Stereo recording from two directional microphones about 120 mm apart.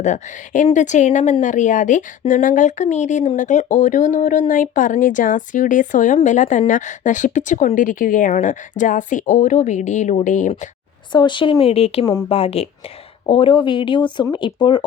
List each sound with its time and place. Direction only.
0.0 s a woman's voice: 85° left
11.1 s speech: 40° left (ahead or behind)
11.6 s a woman's voice: 55° left (ahead or behind); by 14.8 s 40° left (ahead or behind)